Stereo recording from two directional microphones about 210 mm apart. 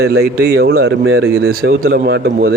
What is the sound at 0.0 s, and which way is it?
A man's voice, 50° right (ahead or behind).